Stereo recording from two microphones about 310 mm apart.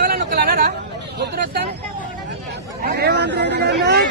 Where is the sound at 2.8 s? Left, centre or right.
Right.